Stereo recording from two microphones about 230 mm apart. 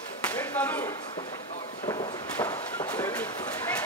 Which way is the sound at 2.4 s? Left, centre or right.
Centre.